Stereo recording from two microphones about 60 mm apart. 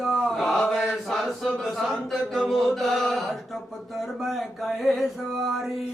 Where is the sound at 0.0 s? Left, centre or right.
Centre.